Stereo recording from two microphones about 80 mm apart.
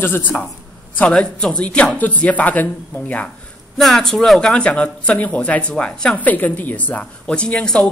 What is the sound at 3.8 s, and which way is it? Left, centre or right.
A woman's voice, centre.